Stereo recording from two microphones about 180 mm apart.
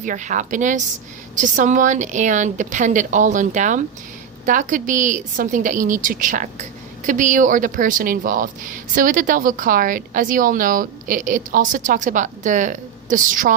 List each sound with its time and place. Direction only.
0.0 s a woman's voice: 45° right (ahead or behind)